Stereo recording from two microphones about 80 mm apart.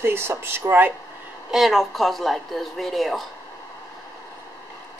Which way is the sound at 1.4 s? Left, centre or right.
Centre.